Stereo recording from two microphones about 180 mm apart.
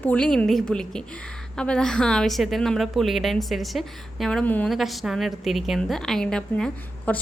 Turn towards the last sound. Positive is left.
turn(degrees=5)  # may be behind; listen again after turning